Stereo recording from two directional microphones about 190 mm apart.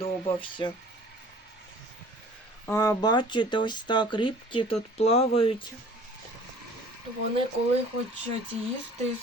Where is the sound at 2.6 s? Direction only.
15° left (ahead or behind); by 5.5 s 30° left (ahead or behind).